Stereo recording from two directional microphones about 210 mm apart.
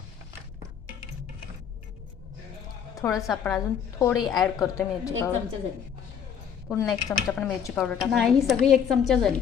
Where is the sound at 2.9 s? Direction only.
15° left (ahead or behind).